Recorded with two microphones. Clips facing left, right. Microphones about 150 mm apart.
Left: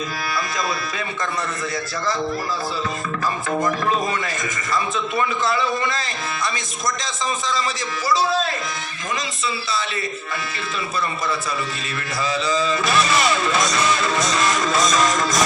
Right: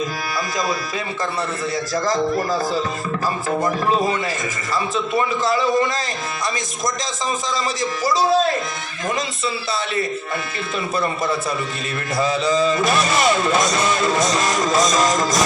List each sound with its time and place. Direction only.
1.7 s a man's voice: 40° right (ahead or behind)
3.6 s a man's voice: 30° right (ahead or behind)
7.5 s music: 45° right (ahead or behind)
10.9 s music: 45° right (ahead or behind)